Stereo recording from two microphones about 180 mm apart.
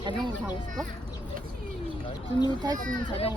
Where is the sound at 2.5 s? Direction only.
25° right (ahead or behind).